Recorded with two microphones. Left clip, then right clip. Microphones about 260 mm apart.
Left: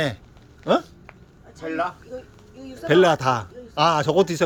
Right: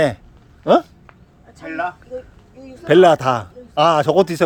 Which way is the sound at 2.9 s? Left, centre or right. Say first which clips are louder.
Right 5 dB; centre.